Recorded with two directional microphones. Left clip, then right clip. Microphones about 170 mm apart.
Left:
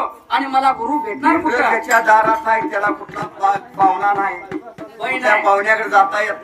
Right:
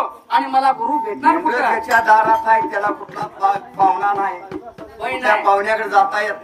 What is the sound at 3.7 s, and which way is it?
Speech, 25° left (ahead or behind).